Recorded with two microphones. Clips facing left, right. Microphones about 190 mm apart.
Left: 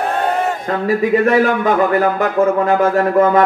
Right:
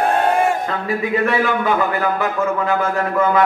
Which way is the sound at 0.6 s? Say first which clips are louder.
Left 5 dB; 40° left (ahead or behind).